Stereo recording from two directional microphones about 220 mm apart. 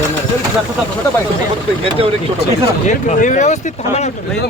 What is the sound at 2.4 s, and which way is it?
Speech, 45° left (ahead or behind).